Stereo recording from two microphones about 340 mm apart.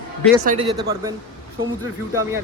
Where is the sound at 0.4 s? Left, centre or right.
Centre.